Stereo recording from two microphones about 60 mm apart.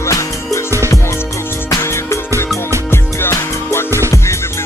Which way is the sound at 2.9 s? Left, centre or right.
Left.